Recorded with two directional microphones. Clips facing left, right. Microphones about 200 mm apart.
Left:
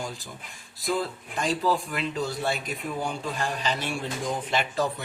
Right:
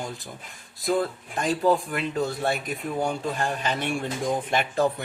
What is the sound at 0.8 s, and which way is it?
Speech, 55° right (ahead or behind).